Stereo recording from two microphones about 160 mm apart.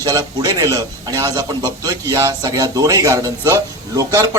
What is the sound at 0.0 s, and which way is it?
A man's voice, 25° right (ahead or behind).